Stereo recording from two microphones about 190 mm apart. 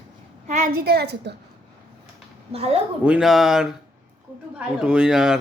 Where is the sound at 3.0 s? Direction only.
5° right (ahead or behind).